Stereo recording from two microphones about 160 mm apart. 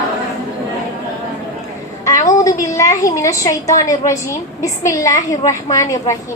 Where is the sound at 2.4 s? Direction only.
20° left (ahead or behind).